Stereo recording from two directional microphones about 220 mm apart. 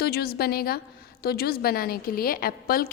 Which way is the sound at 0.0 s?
45° left (ahead or behind).